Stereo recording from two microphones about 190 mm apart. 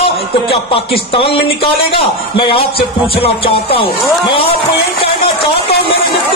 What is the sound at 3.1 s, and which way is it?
A man's voice, 30° left (ahead or behind).